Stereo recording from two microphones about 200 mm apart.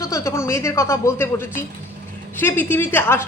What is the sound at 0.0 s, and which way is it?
A woman's voice, 15° left (ahead or behind).